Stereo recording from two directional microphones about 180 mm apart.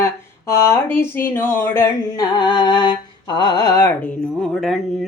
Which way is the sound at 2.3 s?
25° left (ahead or behind).